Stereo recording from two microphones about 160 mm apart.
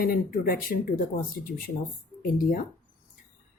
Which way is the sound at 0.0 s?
65° left (ahead or behind).